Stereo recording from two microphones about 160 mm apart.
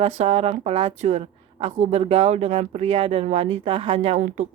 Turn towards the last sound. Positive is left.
turn(degrees=-45)  # may be behind; listen again after turning